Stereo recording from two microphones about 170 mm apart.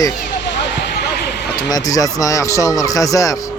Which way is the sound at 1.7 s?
20° left (ahead or behind).